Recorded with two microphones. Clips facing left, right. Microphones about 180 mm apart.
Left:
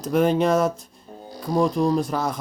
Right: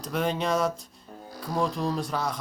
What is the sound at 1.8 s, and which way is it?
Speech, 50° left (ahead or behind).